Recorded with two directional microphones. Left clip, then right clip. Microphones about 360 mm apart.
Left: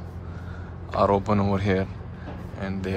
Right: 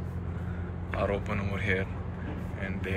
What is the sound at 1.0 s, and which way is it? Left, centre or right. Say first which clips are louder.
Speech: left 10 dB; centre.